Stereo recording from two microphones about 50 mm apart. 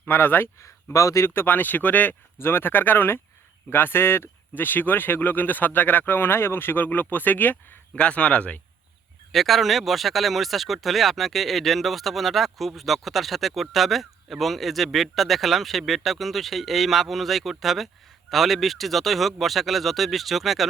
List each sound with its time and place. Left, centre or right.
0.1 s speech: left
0.9 s speech: left
1.3 s speech: left
2.4 s speech: left
7.9 s speech: left
9.3 s speech: centre